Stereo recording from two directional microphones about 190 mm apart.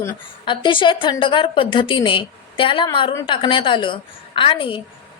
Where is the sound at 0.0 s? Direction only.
25° left (ahead or behind).